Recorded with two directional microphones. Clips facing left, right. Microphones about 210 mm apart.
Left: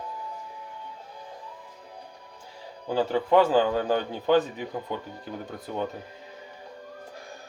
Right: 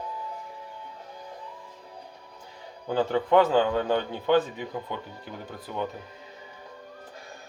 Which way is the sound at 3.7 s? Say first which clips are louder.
Even; 35° left (ahead or behind).